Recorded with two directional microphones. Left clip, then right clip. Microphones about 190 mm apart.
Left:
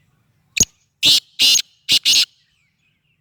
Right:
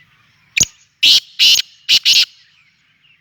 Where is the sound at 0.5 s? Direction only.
20° left (ahead or behind).